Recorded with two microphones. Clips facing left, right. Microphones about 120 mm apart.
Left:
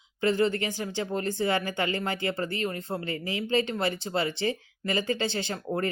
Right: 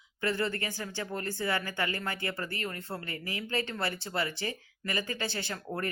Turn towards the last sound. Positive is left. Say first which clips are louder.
# left 6 dB
turn(degrees=25)  # may be behind; listen again after turning